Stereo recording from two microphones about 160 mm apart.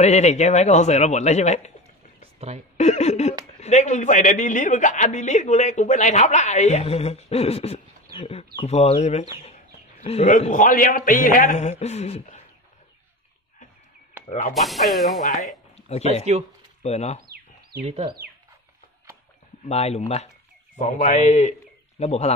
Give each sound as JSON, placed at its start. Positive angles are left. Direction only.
{"t": 0.0, "sound": "a man's voice", "side_deg": 45}
{"t": 2.4, "sound": "speech", "side_deg": -40}
{"t": 2.8, "sound": "a man's voice", "side_deg": 45}
{"t": 10.4, "sound": "a man's voice", "side_deg": 55}
{"t": 11.8, "sound": "a man's voice", "side_deg": 45}
{"t": 14.2, "sound": "a sound", "side_deg": -10}
{"t": 14.5, "sound": "speech", "side_deg": 0}
{"t": 15.7, "sound": "speech", "side_deg": 40}
{"t": 17.3, "sound": "a sound", "side_deg": -70}
{"t": 17.8, "sound": "speech", "side_deg": -40}
{"t": 19.6, "sound": "a man's voice", "side_deg": 40}